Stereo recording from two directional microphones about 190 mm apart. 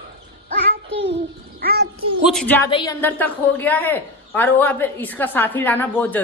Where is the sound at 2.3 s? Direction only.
5° left (ahead or behind).